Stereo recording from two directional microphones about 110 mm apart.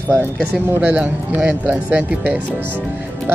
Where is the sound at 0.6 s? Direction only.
15° right (ahead or behind).